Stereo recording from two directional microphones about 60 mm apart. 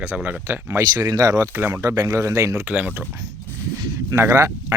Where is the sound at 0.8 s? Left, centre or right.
Right.